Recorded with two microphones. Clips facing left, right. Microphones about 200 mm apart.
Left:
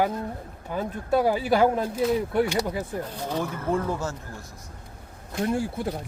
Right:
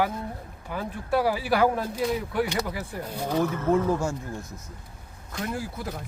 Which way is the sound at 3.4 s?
10° left (ahead or behind).